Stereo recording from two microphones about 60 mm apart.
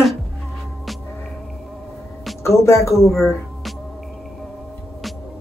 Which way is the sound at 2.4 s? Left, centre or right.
Left.